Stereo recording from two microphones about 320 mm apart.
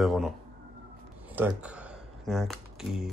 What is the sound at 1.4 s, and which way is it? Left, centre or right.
Speech, centre.